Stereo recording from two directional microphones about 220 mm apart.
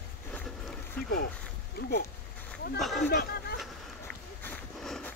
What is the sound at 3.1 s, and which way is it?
Speech, 45° left (ahead or behind).